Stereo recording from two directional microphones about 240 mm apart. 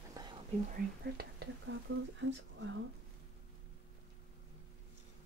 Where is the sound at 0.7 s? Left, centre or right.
Right.